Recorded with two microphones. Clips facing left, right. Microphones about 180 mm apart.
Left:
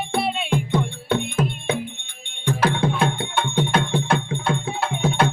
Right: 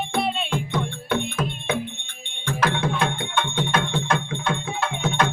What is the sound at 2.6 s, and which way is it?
Music, 30° left (ahead or behind).